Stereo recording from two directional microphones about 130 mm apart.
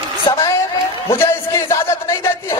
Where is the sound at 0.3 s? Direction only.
30° left (ahead or behind).